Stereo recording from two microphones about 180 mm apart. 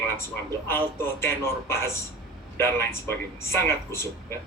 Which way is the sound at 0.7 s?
15° left (ahead or behind).